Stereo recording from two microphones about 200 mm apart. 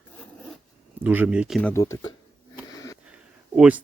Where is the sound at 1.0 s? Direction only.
10° right (ahead or behind).